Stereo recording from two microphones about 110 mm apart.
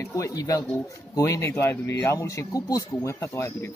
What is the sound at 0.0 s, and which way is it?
Speech, 30° left (ahead or behind).